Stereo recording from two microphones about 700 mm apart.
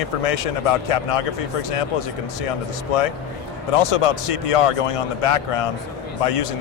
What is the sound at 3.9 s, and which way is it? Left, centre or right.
A man's voice, left.